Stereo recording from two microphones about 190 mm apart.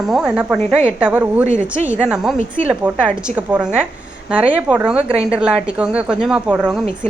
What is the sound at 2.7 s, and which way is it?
A woman's voice, 5° right (ahead or behind).